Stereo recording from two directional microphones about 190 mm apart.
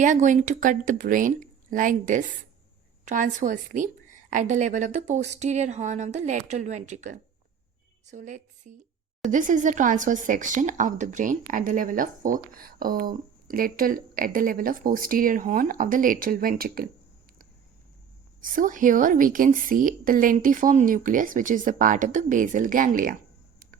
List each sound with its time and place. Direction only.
0.0 s a woman's voice: 40° right (ahead or behind)
18.4 s speech: 45° right (ahead or behind)